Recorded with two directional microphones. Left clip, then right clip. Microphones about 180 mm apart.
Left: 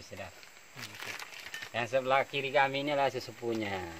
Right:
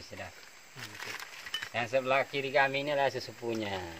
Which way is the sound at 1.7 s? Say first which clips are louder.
Even; 30° left (ahead or behind).